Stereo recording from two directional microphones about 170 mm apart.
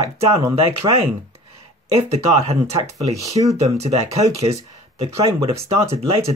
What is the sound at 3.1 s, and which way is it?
Speech, 20° right (ahead or behind).